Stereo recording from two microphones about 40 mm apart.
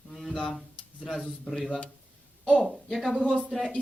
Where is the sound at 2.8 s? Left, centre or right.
Centre.